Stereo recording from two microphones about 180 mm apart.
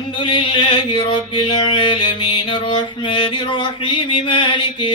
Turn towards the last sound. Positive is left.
turn(degrees=25)  # may be behind; listen again after turning